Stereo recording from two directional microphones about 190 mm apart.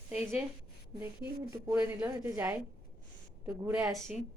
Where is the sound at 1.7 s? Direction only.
10° right (ahead or behind).